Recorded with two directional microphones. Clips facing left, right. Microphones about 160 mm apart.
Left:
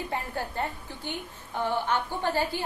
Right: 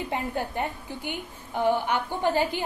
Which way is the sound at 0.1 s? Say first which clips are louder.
Right 3 dB; 15° right (ahead or behind).